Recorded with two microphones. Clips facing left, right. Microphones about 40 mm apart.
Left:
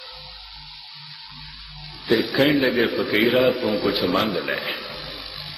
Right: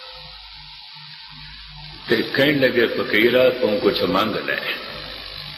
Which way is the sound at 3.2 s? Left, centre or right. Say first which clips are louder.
Right 3 dB; right.